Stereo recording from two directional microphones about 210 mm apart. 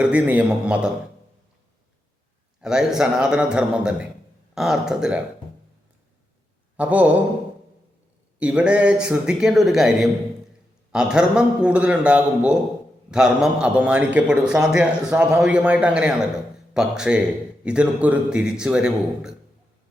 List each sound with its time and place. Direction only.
0.0 s a man's voice: 5° right (ahead or behind)
2.6 s a man's voice: 5° right (ahead or behind)
6.7 s speech: 5° right (ahead or behind)
8.4 s a man's voice: 5° right (ahead or behind)